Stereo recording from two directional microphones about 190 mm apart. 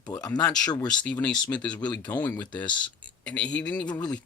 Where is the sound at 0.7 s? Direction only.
20° left (ahead or behind).